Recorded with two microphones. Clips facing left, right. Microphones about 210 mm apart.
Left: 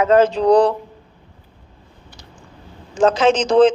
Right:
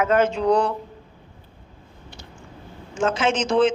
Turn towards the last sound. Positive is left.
turn(degrees=35)  # may be behind; listen again after turning